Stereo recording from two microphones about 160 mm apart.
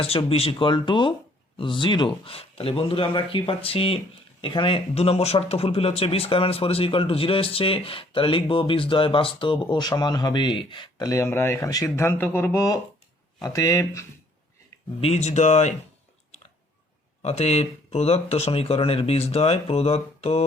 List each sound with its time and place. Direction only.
0.0 s speech: 35° left (ahead or behind); by 14.0 s 20° left (ahead or behind)
15.0 s speech: 45° left (ahead or behind)
17.2 s speech: 40° left (ahead or behind)